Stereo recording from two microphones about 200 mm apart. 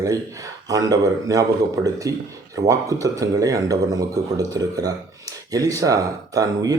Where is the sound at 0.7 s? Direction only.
15° right (ahead or behind).